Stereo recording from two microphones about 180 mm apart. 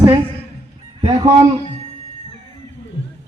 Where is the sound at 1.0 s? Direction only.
25° right (ahead or behind).